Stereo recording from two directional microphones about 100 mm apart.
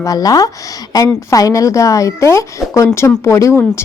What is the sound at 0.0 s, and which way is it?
A woman's voice, 35° left (ahead or behind).